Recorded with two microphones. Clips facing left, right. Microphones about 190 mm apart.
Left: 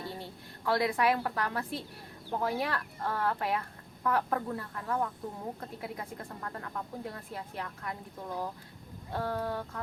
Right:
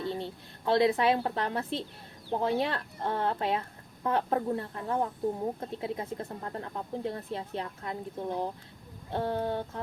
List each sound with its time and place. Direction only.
0.1 s a woman's voice: 20° right (ahead or behind)